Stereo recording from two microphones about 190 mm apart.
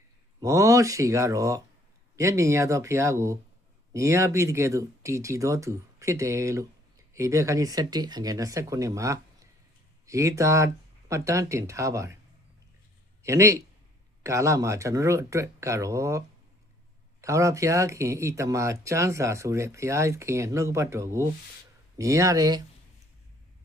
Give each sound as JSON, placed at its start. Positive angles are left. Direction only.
{"t": 0.3, "sound": "speech", "side_deg": -15}
{"t": 13.2, "sound": "speech", "side_deg": -15}